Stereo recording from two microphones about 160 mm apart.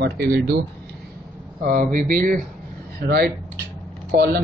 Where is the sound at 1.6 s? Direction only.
60° right (ahead or behind).